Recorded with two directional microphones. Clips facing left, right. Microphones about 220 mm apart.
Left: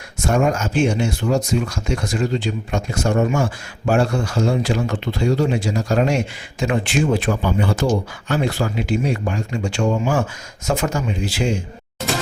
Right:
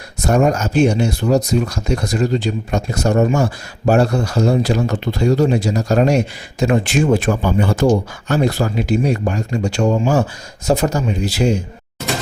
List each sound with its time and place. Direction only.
0.2 s speech: 40° right (ahead or behind)